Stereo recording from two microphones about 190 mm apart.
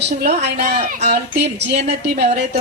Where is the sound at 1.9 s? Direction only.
60° right (ahead or behind).